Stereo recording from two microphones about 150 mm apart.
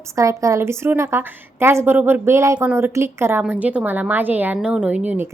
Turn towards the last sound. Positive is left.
turn(degrees=-10)  # may be behind; listen again after turning